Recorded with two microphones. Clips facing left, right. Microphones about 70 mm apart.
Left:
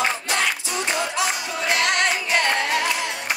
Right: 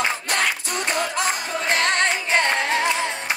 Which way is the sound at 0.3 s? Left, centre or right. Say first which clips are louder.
Even; right.